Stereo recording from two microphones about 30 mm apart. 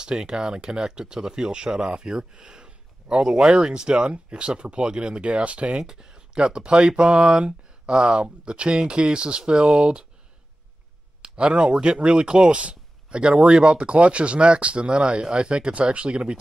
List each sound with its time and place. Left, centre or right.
0.0 s speech: right
5.8 s speech: right
11.2 s speech: right